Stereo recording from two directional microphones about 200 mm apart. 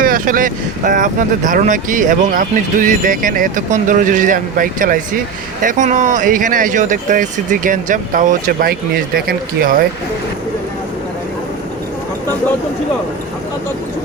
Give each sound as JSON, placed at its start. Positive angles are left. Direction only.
{"t": 0.0, "sound": "speech", "side_deg": -45}